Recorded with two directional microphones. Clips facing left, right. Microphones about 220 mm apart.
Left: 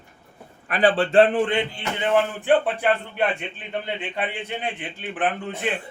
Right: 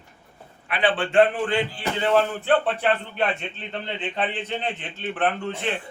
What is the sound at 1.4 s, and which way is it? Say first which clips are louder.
A man's voice: even; 20° left (ahead or behind).